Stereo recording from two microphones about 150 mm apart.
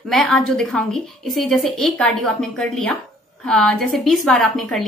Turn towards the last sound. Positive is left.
turn(degrees=5)  # may be behind; listen again after turning